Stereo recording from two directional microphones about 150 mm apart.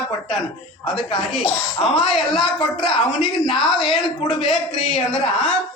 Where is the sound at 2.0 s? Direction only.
Centre (ahead or behind).